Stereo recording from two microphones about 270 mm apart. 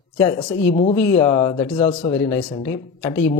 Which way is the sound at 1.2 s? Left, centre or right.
Centre.